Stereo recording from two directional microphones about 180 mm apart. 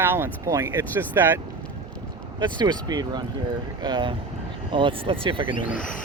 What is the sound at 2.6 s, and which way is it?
Speech, 25° right (ahead or behind).